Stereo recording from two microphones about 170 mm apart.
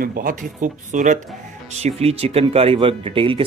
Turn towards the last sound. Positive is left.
turn(degrees=-30)  # may be behind; listen again after turning